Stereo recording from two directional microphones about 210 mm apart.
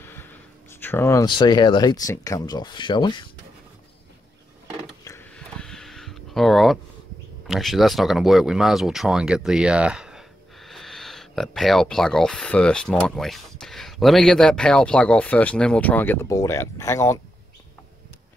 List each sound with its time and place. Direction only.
0.0 s speech: 10° left (ahead or behind)
5.0 s a sound: 10° left (ahead or behind)
7.4 s speech: centre (ahead or behind)